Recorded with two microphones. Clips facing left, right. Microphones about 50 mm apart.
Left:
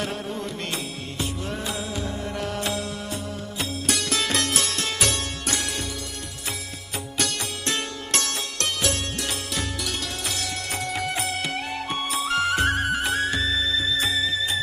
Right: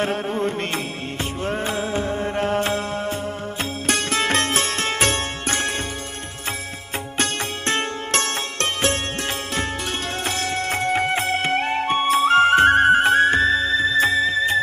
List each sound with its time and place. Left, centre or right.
0.0 s music: right
7.2 s music: right
10.2 s music: right